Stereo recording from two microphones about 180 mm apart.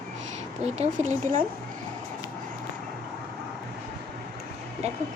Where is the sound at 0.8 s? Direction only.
40° right (ahead or behind).